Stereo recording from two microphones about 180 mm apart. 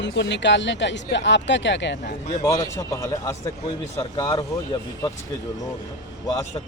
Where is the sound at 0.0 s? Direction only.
80° left.